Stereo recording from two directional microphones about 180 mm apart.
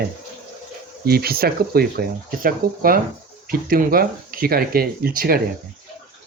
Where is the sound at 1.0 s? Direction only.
60° right (ahead or behind).